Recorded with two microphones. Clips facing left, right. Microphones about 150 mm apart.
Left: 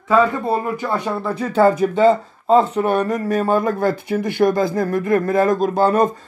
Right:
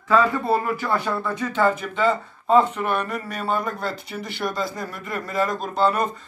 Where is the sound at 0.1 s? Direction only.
25° left (ahead or behind).